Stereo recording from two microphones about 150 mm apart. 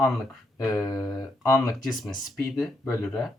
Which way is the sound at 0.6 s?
25° left (ahead or behind).